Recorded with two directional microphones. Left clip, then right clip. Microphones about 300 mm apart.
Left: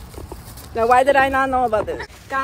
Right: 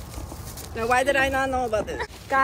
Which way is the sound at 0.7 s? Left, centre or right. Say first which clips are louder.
Left 7 dB; centre.